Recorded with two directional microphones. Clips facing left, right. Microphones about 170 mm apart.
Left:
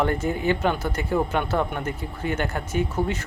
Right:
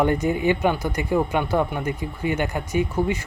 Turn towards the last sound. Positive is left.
turn(degrees=-10)  # may be behind; listen again after turning